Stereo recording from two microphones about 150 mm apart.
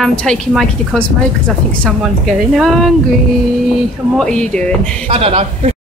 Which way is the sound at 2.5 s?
Centre (ahead or behind).